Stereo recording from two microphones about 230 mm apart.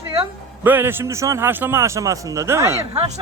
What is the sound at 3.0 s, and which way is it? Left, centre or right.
Speech, right.